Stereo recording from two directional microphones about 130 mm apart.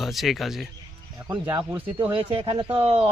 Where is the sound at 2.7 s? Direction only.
50° right (ahead or behind).